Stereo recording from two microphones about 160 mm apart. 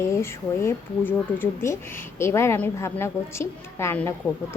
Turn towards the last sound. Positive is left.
turn(degrees=15)  # may be behind; listen again after turning